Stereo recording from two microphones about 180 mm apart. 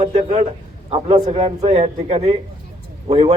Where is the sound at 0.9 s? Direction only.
30° right (ahead or behind).